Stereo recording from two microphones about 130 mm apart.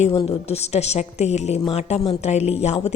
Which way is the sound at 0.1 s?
40° left (ahead or behind).